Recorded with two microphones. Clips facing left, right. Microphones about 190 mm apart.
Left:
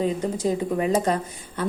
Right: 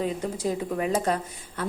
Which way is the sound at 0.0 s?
25° left (ahead or behind).